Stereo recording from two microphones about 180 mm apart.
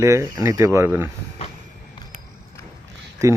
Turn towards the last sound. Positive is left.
turn(degrees=-15)  # may be behind; listen again after turning